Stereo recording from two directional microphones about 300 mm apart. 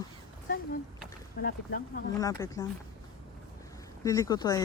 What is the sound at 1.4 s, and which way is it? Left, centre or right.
Speech, left.